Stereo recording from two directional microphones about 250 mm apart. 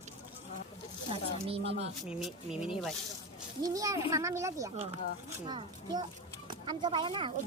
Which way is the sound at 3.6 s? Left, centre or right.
Centre.